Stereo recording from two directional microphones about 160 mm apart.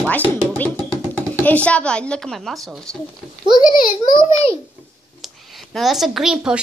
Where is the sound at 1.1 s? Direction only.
10° left (ahead or behind).